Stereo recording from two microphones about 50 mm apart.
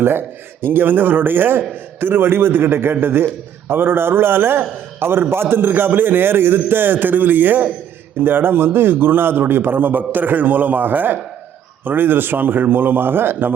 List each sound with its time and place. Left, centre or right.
0.0 s speech: right